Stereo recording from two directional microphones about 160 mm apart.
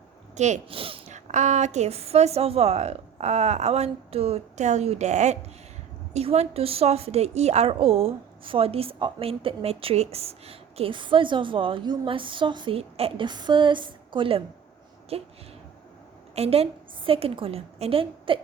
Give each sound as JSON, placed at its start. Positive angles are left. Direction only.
{"t": 0.3, "sound": "a woman's voice", "side_deg": -45}
{"t": 16.3, "sound": "a woman's voice", "side_deg": -40}